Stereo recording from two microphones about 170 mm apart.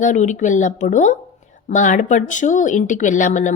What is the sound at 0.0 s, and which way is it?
Speech, 45° left (ahead or behind).